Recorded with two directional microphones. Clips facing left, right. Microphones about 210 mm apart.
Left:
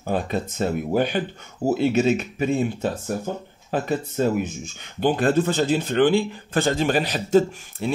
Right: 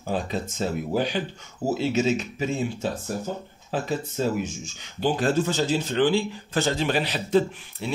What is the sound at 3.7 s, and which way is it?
Speech, 60° left (ahead or behind).